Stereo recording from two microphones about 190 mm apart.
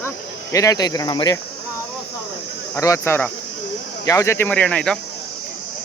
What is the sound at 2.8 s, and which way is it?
Speech, 15° left (ahead or behind).